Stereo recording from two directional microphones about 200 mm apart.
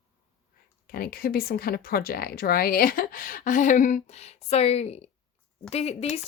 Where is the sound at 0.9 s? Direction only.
45° left (ahead or behind).